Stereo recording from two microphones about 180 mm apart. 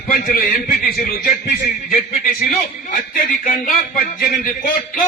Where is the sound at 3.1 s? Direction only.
50° left (ahead or behind).